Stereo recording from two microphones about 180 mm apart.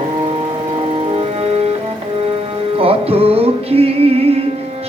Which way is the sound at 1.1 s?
35° right (ahead or behind).